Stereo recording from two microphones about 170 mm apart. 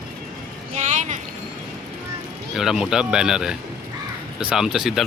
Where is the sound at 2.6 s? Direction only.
Centre (ahead or behind).